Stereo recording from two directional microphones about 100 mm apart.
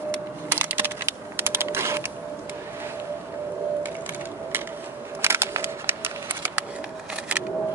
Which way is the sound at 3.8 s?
20° right (ahead or behind).